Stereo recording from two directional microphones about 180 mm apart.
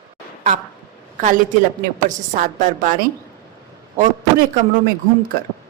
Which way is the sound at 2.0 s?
45° right (ahead or behind).